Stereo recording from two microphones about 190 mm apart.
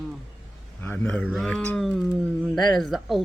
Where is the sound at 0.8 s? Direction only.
10° left (ahead or behind).